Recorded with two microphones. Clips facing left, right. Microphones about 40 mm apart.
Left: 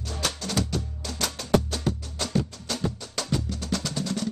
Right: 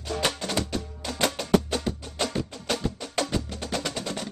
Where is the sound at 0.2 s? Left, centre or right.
Right.